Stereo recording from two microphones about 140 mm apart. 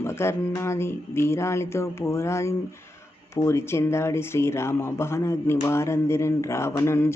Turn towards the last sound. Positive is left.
turn(degrees=20)  # may be behind; listen again after turning